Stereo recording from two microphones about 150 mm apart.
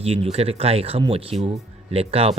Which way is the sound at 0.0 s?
40° right (ahead or behind).